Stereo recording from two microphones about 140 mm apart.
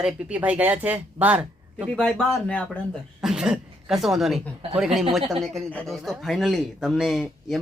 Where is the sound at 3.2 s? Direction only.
5° right (ahead or behind).